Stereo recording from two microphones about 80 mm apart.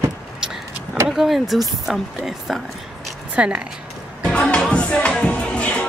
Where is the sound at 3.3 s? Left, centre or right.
Centre.